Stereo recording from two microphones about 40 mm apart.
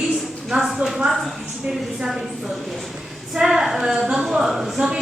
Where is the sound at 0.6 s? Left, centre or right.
Centre.